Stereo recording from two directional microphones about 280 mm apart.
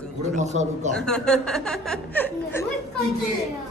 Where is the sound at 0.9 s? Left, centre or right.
Centre.